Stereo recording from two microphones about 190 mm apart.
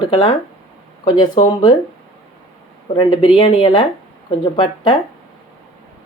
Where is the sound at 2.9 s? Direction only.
25° left (ahead or behind).